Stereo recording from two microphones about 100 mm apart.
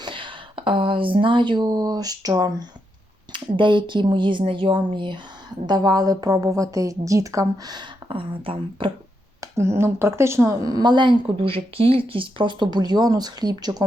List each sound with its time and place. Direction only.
0.0 s speech: 55° right (ahead or behind); by 2.5 s 40° right (ahead or behind)
3.3 s a woman's voice: 55° right (ahead or behind)
8.1 s speech: 65° right (ahead or behind)
9.4 s speech: 25° right (ahead or behind)